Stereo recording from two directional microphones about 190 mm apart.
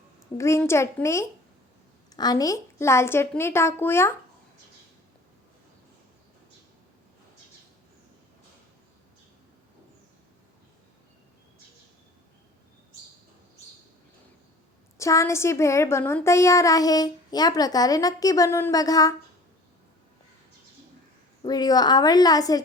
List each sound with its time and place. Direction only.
0.3 s speech: 15° left (ahead or behind)
14.9 s speech: 15° left (ahead or behind)
21.4 s a woman's voice: 20° left (ahead or behind)